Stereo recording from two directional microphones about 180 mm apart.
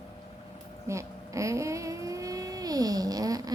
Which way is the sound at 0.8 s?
15° right (ahead or behind).